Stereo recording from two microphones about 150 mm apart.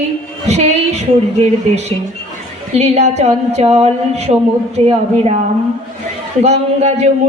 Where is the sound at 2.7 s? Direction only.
45° right (ahead or behind).